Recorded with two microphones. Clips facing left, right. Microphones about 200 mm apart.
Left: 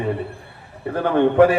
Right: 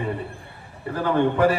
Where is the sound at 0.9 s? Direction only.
60° left (ahead or behind).